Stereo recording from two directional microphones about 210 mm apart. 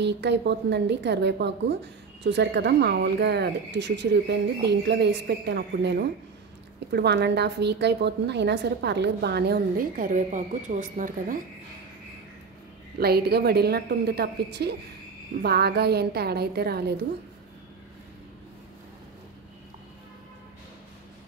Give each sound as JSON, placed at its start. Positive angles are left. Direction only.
{"t": 0.0, "sound": "a woman's voice", "side_deg": -55}
{"t": 13.0, "sound": "a woman's voice", "side_deg": -50}